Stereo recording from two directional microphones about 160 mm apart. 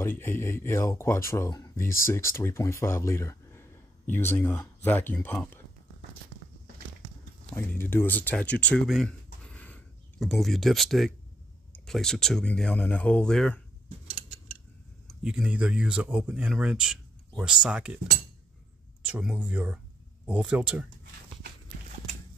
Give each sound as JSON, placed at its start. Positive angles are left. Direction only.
{"t": 0.0, "sound": "speech", "side_deg": 15}
{"t": 7.5, "sound": "speech", "side_deg": 15}
{"t": 15.0, "sound": "speech", "side_deg": -5}
{"t": 19.0, "sound": "speech", "side_deg": -10}